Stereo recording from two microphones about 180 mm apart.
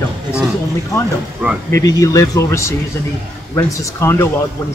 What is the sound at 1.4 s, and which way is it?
Speech, 10° right (ahead or behind).